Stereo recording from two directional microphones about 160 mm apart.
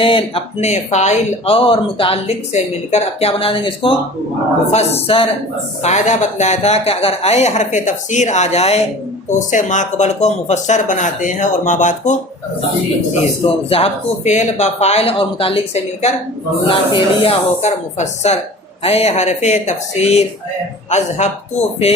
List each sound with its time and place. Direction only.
0.0 s speech: 35° left (ahead or behind)
5.8 s speech: 45° left (ahead or behind)
13.7 s speech: 40° left (ahead or behind)